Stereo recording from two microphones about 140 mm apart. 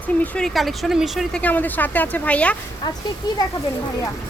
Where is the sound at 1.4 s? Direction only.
10° left (ahead or behind).